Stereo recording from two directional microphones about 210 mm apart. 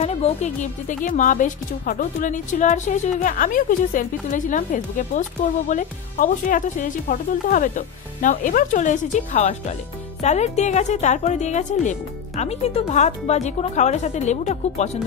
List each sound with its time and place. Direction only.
0.0 s a woman's voice: 30° left (ahead or behind)